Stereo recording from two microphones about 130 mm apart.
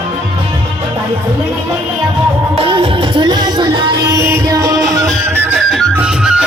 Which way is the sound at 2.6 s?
40° right (ahead or behind).